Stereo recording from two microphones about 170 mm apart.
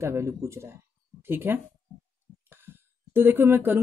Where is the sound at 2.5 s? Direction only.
15° right (ahead or behind).